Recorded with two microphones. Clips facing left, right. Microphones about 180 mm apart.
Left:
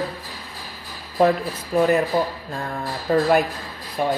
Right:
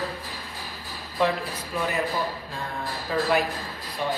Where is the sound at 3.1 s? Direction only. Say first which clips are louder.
Left 6 dB; 45° left (ahead or behind).